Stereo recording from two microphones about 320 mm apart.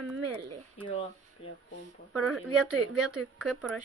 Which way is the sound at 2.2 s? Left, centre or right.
Centre.